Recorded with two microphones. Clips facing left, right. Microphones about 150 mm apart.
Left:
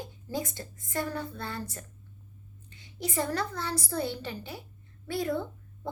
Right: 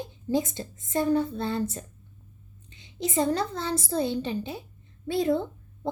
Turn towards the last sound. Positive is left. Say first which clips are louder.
# right 5 dB
turn(degrees=-25)  # may be behind; listen again after turning